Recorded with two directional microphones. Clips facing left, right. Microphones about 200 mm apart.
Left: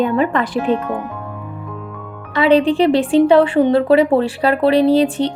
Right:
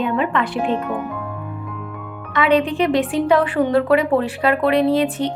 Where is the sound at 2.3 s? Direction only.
30° left (ahead or behind).